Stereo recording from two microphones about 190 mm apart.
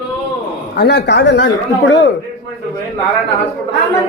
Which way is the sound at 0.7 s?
60° left (ahead or behind).